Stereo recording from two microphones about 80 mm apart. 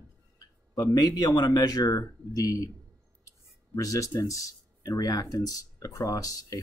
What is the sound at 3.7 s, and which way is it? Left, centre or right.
Speech, left.